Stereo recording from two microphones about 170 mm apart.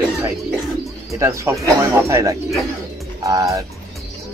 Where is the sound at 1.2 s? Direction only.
15° right (ahead or behind).